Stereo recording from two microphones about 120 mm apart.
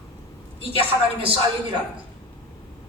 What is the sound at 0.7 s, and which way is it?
Speech, 50° right (ahead or behind).